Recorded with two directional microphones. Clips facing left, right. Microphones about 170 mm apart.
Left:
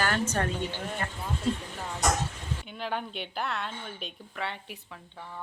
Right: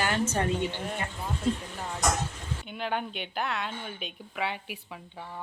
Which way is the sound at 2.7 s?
Centre (ahead or behind).